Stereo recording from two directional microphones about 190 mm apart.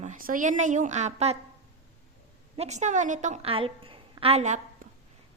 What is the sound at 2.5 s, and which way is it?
A woman's voice, 35° right (ahead or behind).